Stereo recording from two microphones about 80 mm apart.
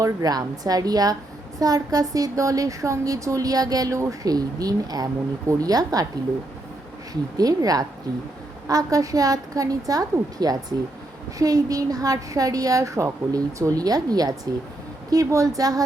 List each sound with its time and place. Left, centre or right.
0.0 s a woman's voice: right
7.1 s a woman's voice: right